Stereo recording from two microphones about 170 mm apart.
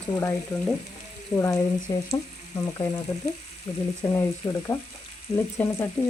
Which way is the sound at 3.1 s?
15° left (ahead or behind).